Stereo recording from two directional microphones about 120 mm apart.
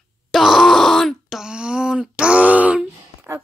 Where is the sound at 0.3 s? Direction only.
Centre (ahead or behind).